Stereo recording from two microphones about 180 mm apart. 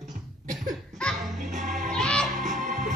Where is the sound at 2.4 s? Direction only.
45° right (ahead or behind).